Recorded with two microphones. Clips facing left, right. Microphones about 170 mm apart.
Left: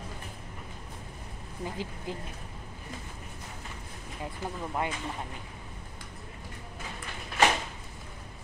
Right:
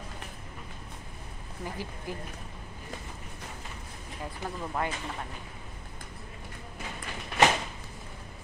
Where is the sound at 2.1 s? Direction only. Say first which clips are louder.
Even; 20° left (ahead or behind).